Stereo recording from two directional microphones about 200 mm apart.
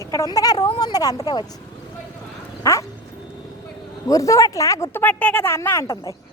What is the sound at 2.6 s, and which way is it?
Cat, 15° left (ahead or behind).